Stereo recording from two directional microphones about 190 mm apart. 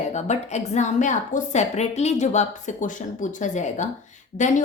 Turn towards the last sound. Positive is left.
turn(degrees=40)  # may be behind; listen again after turning